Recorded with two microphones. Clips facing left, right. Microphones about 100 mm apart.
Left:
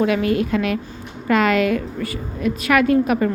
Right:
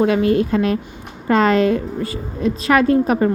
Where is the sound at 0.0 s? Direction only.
30° right (ahead or behind).